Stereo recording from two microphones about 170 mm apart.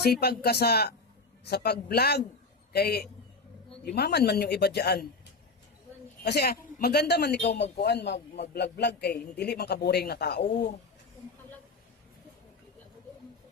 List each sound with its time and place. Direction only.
0.0 s a man's voice: 70° left (ahead or behind)
6.2 s a man's voice: 70° left (ahead or behind)